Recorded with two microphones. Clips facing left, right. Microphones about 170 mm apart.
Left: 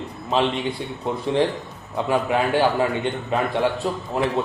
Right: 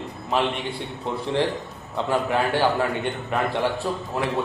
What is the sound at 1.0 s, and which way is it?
A man's voice, 15° left (ahead or behind).